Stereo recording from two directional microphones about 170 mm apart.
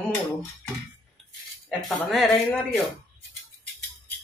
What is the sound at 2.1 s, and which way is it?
Speech, 5° left (ahead or behind).